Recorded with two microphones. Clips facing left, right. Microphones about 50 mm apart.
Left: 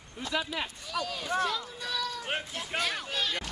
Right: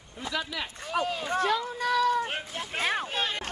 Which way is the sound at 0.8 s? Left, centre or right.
Right.